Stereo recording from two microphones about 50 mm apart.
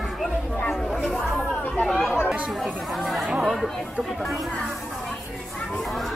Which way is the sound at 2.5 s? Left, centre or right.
Centre.